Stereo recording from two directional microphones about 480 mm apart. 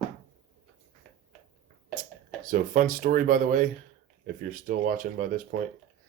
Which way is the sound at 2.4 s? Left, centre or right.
Centre.